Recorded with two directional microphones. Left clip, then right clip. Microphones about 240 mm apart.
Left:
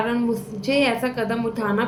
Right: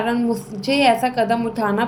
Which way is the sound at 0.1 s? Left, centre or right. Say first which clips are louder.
Right 2 dB; centre.